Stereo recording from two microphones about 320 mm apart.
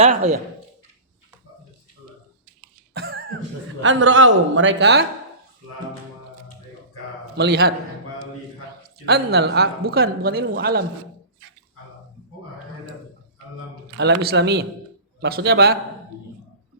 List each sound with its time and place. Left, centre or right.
0.0 s speech: centre
2.9 s cough: right
3.8 s a man's voice: right
7.3 s speech: right
9.0 s speech: right
14.0 s a man's voice: right